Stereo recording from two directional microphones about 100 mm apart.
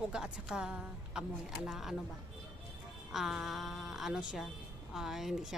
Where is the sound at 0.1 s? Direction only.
10° right (ahead or behind).